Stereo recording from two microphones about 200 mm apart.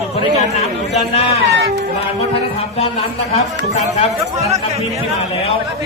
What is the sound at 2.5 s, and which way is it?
Speech, 30° left (ahead or behind).